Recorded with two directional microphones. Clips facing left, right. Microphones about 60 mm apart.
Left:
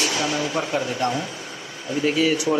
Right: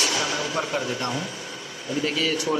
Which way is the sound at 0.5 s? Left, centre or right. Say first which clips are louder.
Left 2 dB; centre.